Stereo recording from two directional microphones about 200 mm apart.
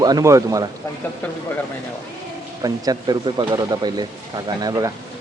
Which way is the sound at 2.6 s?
20° right (ahead or behind).